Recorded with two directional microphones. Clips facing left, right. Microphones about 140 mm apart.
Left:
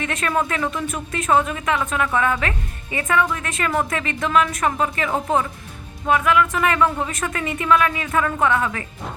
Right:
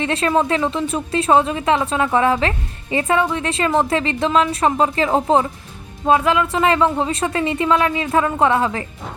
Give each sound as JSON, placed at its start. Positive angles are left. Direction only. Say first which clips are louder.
{"t": 0.0, "sound": "speech", "louder": "right 5 dB", "side_deg": -30}